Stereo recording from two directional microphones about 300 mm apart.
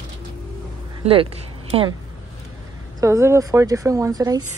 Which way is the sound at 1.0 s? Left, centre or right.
Centre.